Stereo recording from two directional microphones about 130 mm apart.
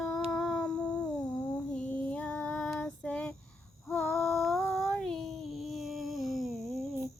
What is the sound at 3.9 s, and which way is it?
Female singing, 20° left (ahead or behind).